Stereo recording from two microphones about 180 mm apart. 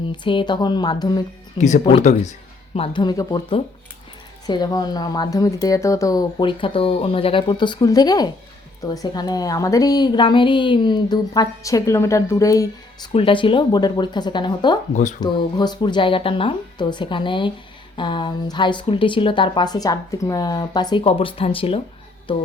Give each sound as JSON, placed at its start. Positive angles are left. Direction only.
{"t": 0.1, "sound": "a woman's voice", "side_deg": 25}
{"t": 1.5, "sound": "speech", "side_deg": 40}
{"t": 2.7, "sound": "a woman's voice", "side_deg": 30}
{"t": 13.1, "sound": "a woman's voice", "side_deg": 30}